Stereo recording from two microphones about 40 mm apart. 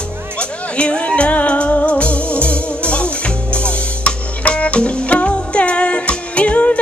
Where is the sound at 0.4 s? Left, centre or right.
Left.